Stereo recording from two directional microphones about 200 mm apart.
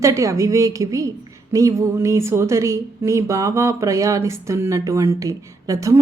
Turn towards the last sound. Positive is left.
turn(degrees=-15)  # may be behind; listen again after turning